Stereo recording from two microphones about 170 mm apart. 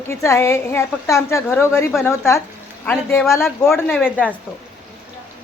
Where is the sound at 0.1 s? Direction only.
15° left (ahead or behind).